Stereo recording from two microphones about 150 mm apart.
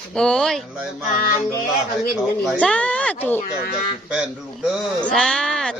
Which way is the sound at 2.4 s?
5° left (ahead or behind).